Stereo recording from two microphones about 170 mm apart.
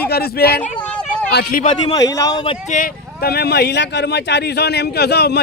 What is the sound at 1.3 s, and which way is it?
Speech, 65° left (ahead or behind).